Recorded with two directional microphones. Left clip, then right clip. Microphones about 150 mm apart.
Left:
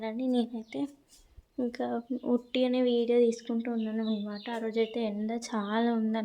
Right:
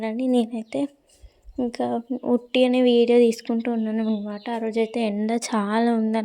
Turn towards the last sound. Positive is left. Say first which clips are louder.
# right 8 dB
turn(degrees=-45)  # may be behind; listen again after turning